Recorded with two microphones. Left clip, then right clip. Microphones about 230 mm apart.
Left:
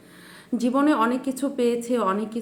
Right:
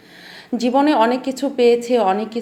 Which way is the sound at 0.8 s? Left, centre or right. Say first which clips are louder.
Right 6 dB; centre.